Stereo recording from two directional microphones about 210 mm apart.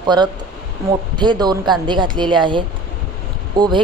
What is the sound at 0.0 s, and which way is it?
A woman's voice, 20° right (ahead or behind).